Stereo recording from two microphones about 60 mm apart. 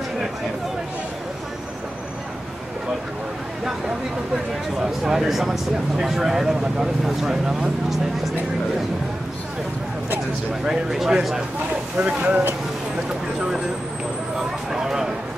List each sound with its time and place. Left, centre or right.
4.7 s speech: centre
10.6 s speech: centre
14.3 s a sound: centre